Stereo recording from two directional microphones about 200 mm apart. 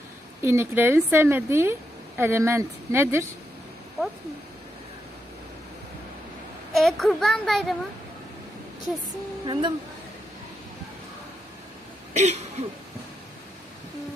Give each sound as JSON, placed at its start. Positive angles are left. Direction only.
{"t": 0.4, "sound": "a woman's voice", "side_deg": -15}
{"t": 6.7, "sound": "a child's voice", "side_deg": 0}
{"t": 9.5, "sound": "speech", "side_deg": -25}
{"t": 12.1, "sound": "throat clearing", "side_deg": -35}
{"t": 12.6, "sound": "a sound", "side_deg": -35}